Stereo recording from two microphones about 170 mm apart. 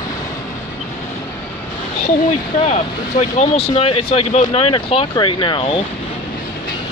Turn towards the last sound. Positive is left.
turn(degrees=30)  # may be behind; listen again after turning